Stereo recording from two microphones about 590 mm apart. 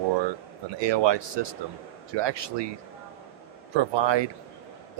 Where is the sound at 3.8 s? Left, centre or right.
Right.